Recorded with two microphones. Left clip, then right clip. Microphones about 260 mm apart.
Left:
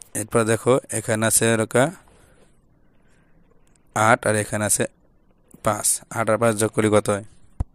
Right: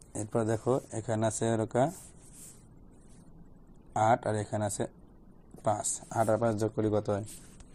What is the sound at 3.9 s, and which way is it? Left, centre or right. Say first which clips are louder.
A man's voice: left 9 dB; left.